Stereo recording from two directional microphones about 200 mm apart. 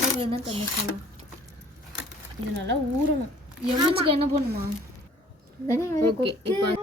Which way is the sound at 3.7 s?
25° right (ahead or behind).